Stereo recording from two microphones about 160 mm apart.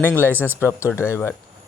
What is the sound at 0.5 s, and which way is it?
Speech, 15° left (ahead or behind).